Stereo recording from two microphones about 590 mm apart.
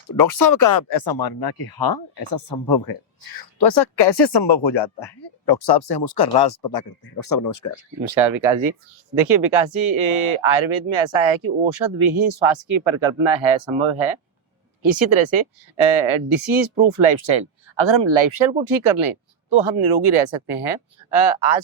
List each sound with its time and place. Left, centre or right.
0.1 s speech: left
8.0 s speech: right
9.6 s speech: right